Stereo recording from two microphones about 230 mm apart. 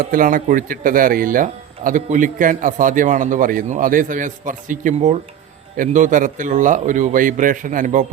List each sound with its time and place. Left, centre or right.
0.0 s speech: right